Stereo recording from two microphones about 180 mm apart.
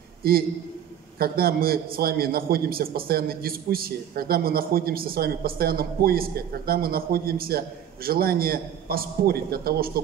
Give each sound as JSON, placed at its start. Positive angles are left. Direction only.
{"t": 0.2, "sound": "a man's voice", "side_deg": -55}